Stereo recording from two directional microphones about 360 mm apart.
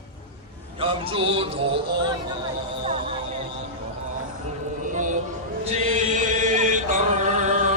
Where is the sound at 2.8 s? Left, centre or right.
Centre.